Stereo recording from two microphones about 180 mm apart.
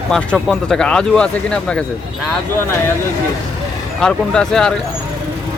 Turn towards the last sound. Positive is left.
turn(degrees=5)  # may be behind; listen again after turning